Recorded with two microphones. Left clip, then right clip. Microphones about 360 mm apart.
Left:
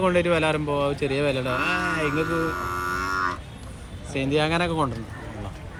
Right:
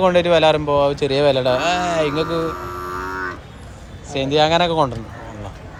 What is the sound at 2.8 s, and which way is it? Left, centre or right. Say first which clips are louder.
Livestock: even; left.